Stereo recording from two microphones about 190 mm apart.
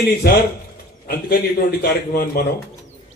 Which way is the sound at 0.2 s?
55° left (ahead or behind).